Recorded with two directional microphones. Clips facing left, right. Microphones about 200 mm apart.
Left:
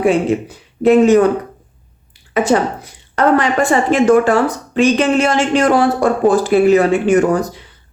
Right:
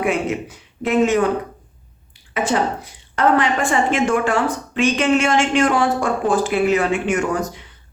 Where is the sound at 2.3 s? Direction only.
40° left (ahead or behind).